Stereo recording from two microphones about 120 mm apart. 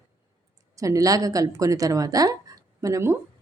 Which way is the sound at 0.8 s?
30° right (ahead or behind).